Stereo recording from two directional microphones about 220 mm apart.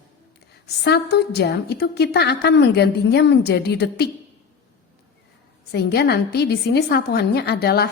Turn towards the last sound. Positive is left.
turn(degrees=45)  # may be behind; listen again after turning